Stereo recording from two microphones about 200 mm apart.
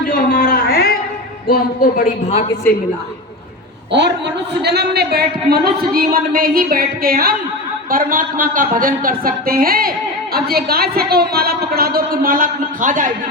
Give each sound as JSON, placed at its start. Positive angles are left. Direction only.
{"t": 0.0, "sound": "a sound", "side_deg": 45}
{"t": 1.5, "sound": "speech", "side_deg": 45}
{"t": 4.6, "sound": "a woman's voice", "side_deg": -55}